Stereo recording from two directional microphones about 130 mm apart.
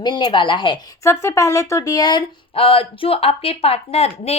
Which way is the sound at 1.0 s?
25° left (ahead or behind).